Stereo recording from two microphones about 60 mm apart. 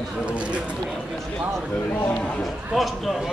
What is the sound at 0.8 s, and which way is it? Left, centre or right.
Speech, centre.